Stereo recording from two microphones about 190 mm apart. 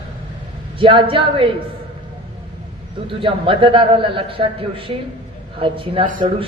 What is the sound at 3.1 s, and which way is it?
A woman's voice, 25° right (ahead or behind).